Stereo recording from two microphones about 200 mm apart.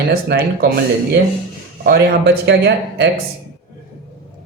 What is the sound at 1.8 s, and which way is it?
Speech, 50° right (ahead or behind).